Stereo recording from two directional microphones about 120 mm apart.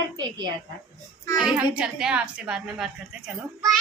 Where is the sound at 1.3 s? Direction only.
5° right (ahead or behind).